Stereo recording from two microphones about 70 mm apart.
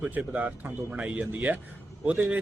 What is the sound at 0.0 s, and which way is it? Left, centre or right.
Speech, centre.